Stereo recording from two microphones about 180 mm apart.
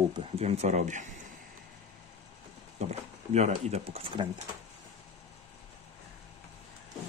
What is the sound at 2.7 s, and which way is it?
Speech, 40° right (ahead or behind).